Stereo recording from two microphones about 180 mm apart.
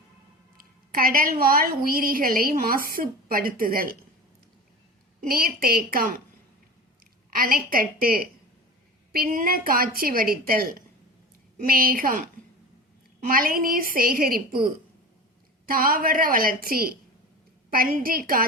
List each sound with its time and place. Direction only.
0.5 s a woman's voice: 55° right (ahead or behind)
5.3 s a woman's voice: 55° right (ahead or behind)
7.3 s a woman's voice: 50° right (ahead or behind)
13.2 s a woman's voice: 50° right (ahead or behind)